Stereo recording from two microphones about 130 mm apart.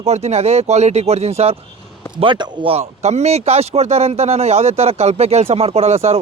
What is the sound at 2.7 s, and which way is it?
Speech, 55° right (ahead or behind).